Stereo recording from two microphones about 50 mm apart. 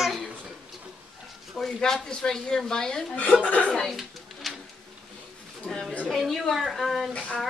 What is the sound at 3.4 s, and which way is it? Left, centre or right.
Speech, left.